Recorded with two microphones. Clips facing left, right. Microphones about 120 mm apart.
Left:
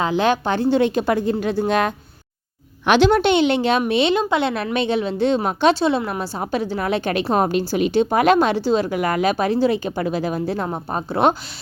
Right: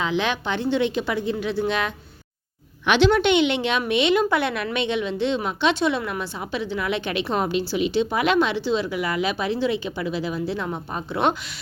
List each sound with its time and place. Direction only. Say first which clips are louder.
0.0 s a woman's voice: left 5 dB; 40° left (ahead or behind)
5.8 s a woman's voice: left 3 dB; 30° left (ahead or behind)